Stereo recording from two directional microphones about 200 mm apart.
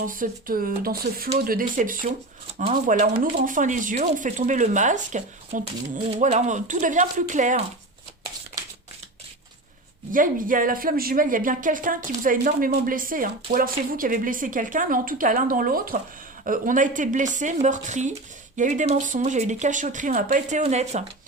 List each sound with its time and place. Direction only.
0.0 s a woman's voice: 45° right (ahead or behind)
10.1 s a woman's voice: 45° right (ahead or behind)